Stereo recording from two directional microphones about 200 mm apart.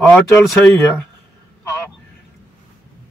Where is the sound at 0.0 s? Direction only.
5° left (ahead or behind).